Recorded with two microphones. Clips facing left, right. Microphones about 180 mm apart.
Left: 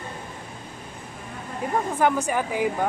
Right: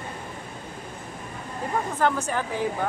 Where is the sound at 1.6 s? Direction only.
15° left (ahead or behind).